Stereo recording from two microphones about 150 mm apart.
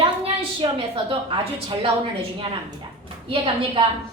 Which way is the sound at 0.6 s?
35° right (ahead or behind).